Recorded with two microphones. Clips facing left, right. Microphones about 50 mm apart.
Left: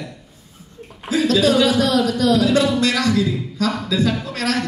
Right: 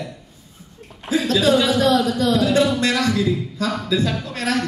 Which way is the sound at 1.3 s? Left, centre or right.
Right.